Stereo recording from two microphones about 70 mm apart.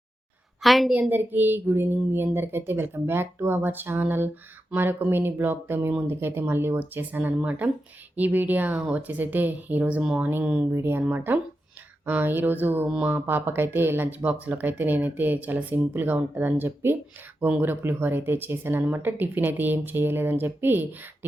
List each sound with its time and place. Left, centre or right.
0.6 s a woman's voice: centre
1.1 s speech: right
10.8 s speech: right